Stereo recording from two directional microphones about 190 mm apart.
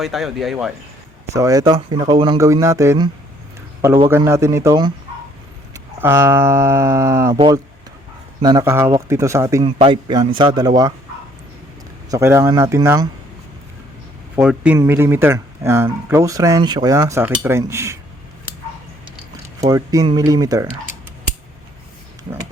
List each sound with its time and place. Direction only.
0.0 s speech: centre (ahead or behind)
1.3 s a man's voice: 15° right (ahead or behind)
7.3 s speech: 25° right (ahead or behind)
9.6 s speech: 25° right (ahead or behind)
12.1 s speech: 15° right (ahead or behind)
14.3 s speech: 5° right (ahead or behind)
19.6 s speech: 20° right (ahead or behind)